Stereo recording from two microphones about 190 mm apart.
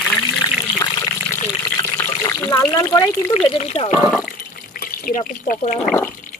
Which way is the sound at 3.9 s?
Centre (ahead or behind).